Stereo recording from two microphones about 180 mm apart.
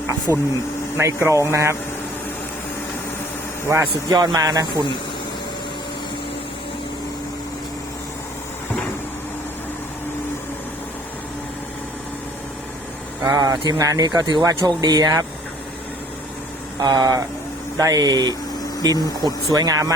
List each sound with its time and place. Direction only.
0.3 s speech: 15° right (ahead or behind)
3.7 s speech: 20° right (ahead or behind)
13.2 s speech: 20° right (ahead or behind)
16.8 s speech: 20° right (ahead or behind)